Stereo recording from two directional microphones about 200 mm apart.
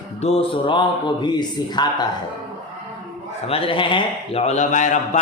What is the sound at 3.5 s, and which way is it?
A man's voice, 25° left (ahead or behind).